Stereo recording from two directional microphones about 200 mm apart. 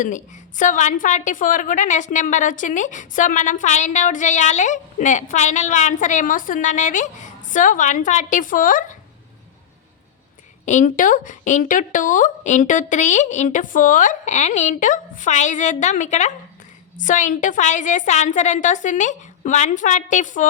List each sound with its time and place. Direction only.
0.0 s a woman's voice: 40° left (ahead or behind)
10.7 s a woman's voice: 40° left (ahead or behind)